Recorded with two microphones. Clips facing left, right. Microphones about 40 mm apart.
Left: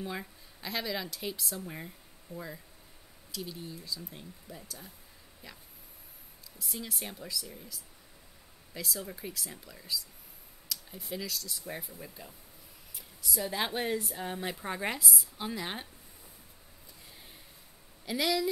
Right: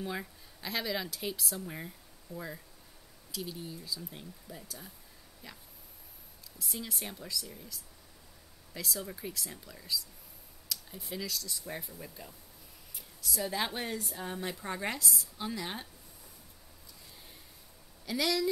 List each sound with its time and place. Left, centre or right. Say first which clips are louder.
0.0 s speech: right 1 dB; centre
6.6 s speech: even; centre
12.9 s a sound: left 1 dB; centre
14.0 s speech: left 2 dB; centre
18.0 s speech: left 1 dB; centre